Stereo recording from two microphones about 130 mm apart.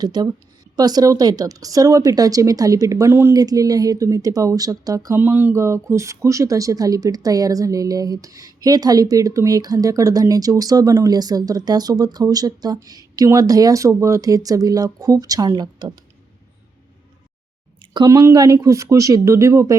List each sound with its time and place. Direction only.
0.0 s a woman's voice: 30° right (ahead or behind)
17.9 s speech: 30° right (ahead or behind)